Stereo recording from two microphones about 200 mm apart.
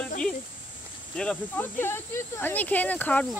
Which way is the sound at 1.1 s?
5° left (ahead or behind).